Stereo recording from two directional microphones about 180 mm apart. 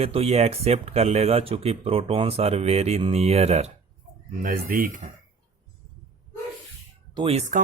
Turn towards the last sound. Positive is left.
turn(degrees=-35)  # may be behind; listen again after turning